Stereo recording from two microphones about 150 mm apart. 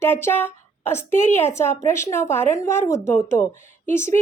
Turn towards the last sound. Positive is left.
turn(degrees=15)  # may be behind; listen again after turning